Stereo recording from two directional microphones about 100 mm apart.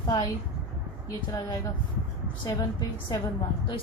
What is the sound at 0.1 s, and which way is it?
A woman's voice, 40° left (ahead or behind).